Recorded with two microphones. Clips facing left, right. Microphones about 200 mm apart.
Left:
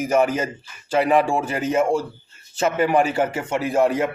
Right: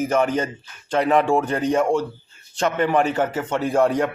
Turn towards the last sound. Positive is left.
turn(degrees=5)  # may be behind; listen again after turning